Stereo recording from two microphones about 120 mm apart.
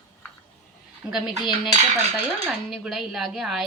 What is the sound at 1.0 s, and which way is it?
Speech, 5° right (ahead or behind).